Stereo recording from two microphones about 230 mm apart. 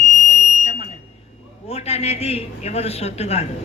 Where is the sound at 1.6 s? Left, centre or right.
Left.